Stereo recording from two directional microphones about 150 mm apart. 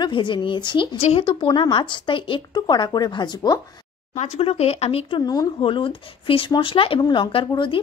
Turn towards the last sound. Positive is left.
turn(degrees=35)  # may be behind; listen again after turning